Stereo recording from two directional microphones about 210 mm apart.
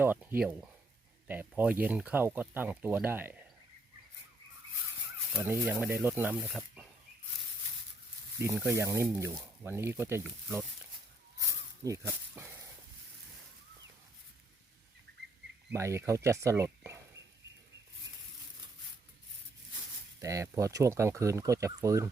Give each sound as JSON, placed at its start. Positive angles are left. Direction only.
{"t": 0.0, "sound": "speech", "side_deg": -10}
{"t": 5.4, "sound": "speech", "side_deg": -10}
{"t": 8.4, "sound": "speech", "side_deg": -10}
{"t": 11.3, "sound": "a sound", "side_deg": -15}
{"t": 15.7, "sound": "speech", "side_deg": -15}
{"t": 20.2, "sound": "speech", "side_deg": -15}